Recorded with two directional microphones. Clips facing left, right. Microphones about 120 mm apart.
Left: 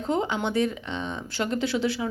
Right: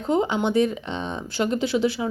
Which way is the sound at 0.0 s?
15° right (ahead or behind).